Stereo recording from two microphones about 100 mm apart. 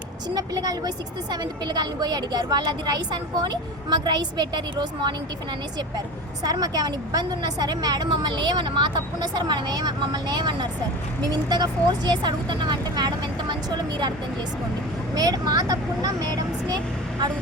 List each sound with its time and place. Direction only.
0.3 s a woman's voice: 40° right (ahead or behind)
6.4 s a woman's voice: 40° right (ahead or behind)
15.1 s speech: 40° right (ahead or behind)